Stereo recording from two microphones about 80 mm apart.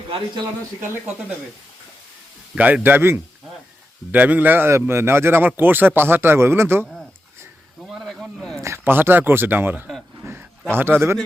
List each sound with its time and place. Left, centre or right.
2.6 s a man's voice: centre
7.9 s a sound: centre
8.6 s a man's voice: right